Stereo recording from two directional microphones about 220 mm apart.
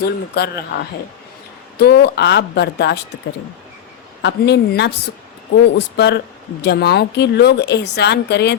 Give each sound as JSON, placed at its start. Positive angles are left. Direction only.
{"t": 0.0, "sound": "speech", "side_deg": 45}
{"t": 4.2, "sound": "speech", "side_deg": 50}